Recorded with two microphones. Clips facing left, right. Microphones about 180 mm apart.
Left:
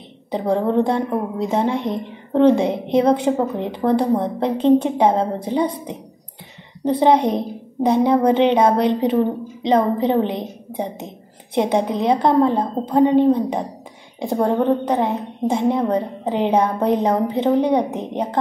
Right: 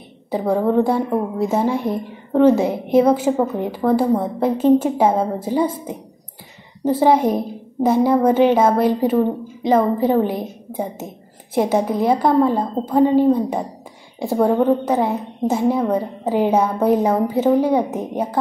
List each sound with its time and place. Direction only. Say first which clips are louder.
0.3 s a woman's voice: right 1 dB; 5° right (ahead or behind)